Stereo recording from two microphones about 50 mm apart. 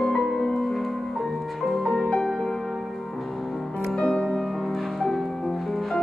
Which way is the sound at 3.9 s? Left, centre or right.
Centre.